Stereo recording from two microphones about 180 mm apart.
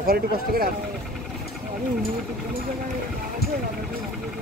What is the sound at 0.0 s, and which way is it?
Speech, 55° right (ahead or behind).